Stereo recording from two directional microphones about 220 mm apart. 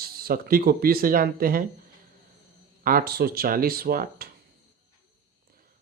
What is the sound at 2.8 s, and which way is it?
Speech, 40° right (ahead or behind).